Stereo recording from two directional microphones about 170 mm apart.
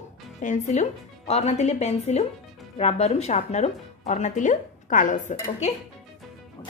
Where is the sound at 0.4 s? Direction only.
45° left (ahead or behind).